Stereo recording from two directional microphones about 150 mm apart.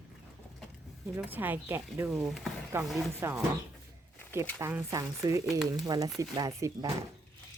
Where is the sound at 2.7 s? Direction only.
15° right (ahead or behind).